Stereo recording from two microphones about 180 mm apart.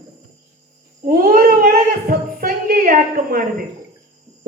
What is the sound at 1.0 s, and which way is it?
A man's voice, 55° right (ahead or behind).